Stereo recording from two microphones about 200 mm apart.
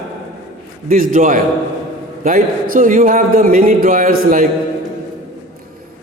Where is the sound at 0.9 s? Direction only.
45° right (ahead or behind).